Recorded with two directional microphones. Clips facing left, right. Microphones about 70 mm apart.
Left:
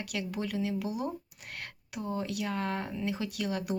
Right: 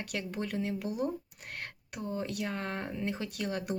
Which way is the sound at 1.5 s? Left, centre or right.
Right.